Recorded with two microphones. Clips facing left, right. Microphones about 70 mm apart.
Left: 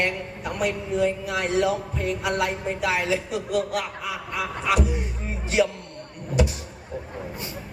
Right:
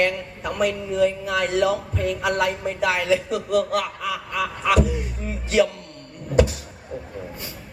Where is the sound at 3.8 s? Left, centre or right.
Left.